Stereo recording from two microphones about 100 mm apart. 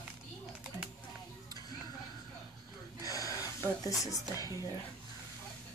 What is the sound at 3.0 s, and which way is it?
Gasp, 35° left (ahead or behind).